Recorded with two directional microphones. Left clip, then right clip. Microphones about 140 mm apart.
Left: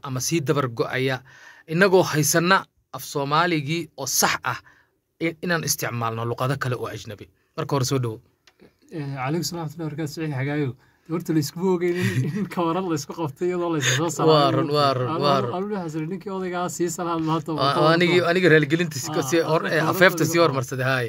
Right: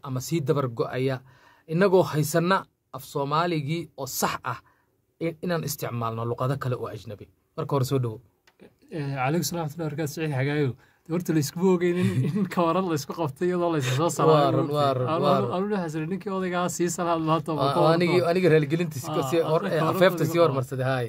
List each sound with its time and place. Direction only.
0.0 s speech: 10° left (ahead or behind)
8.9 s speech: 15° right (ahead or behind)
13.7 s speech: 15° left (ahead or behind)
14.0 s speech: 20° right (ahead or behind)
14.3 s speech: 15° left (ahead or behind)
15.7 s speech: 20° right (ahead or behind)
17.6 s speech: 15° left (ahead or behind)
19.0 s speech: 10° right (ahead or behind)
19.3 s speech: 15° left (ahead or behind)